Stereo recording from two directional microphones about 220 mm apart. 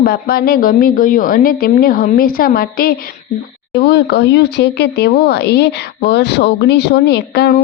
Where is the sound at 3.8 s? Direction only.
50° left (ahead or behind).